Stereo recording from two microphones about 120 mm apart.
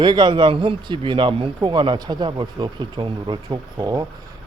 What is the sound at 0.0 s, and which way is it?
A man's voice, 40° right (ahead or behind).